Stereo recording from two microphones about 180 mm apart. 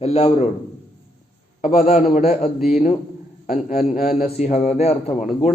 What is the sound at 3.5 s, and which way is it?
Speech, 55° left (ahead or behind).